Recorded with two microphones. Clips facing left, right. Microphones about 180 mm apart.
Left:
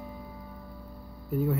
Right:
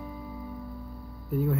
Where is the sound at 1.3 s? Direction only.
Centre (ahead or behind).